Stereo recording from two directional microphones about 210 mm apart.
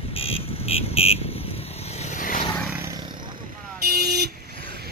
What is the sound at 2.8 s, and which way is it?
Roaring cats, 20° right (ahead or behind).